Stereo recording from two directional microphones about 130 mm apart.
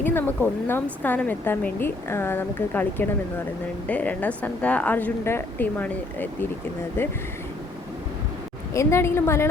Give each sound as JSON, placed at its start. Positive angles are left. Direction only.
{"t": 0.0, "sound": "a woman's voice", "side_deg": 15}
{"t": 8.7, "sound": "a woman's voice", "side_deg": 20}